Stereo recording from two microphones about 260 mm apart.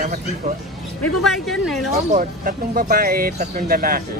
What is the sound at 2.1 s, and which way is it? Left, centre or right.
Speech, right.